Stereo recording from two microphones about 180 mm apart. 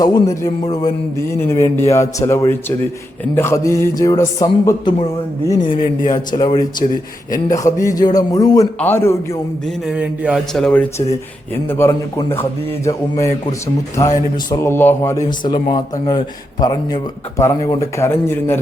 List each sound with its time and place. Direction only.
0.0 s speech: 20° left (ahead or behind)
5.6 s speech: 45° left (ahead or behind)
6.1 s speech: 20° left (ahead or behind)
9.6 s a man's voice: 5° right (ahead or behind); by 13.3 s 15° left (ahead or behind)
14.5 s speech: 15° left (ahead or behind)